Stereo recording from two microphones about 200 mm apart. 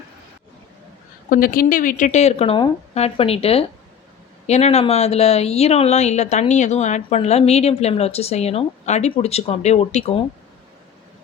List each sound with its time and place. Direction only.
1.3 s speech: 45° left (ahead or behind)